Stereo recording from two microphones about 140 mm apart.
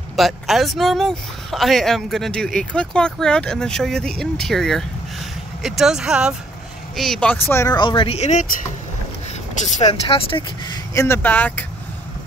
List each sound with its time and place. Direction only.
0.1 s speech: centre (ahead or behind)
7.0 s speech: 5° left (ahead or behind)
7.7 s speech: 35° left (ahead or behind); by 8.5 s 55° left (ahead or behind)
10.0 s speech: 40° left (ahead or behind)
11.0 s speech: 15° left (ahead or behind)